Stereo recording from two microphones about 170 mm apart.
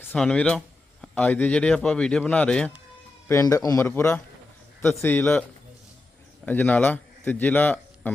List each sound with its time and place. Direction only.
0.0 s speech: 10° left (ahead or behind)
3.2 s a man's voice: 20° left (ahead or behind)